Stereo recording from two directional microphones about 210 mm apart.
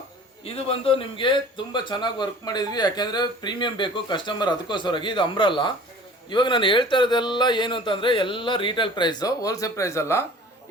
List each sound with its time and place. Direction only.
0.4 s a man's voice: 25° left (ahead or behind)